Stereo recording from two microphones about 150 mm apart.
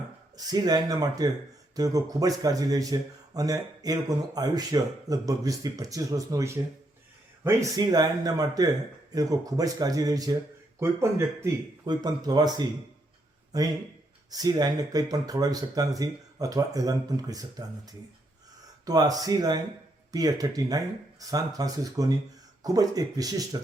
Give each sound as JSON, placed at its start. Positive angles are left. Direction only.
{"t": 0.3, "sound": "a man's voice", "side_deg": -25}
{"t": 11.9, "sound": "a man's voice", "side_deg": -30}